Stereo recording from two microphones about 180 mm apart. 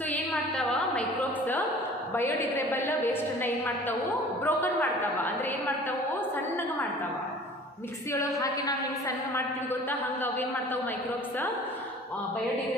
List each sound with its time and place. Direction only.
0.1 s a sound: 5° left (ahead or behind)
2.7 s a woman's voice: 10° left (ahead or behind)
8.4 s a woman's voice: 20° left (ahead or behind)